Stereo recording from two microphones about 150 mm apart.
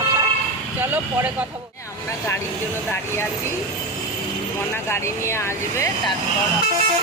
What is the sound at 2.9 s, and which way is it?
Speech, 15° left (ahead or behind).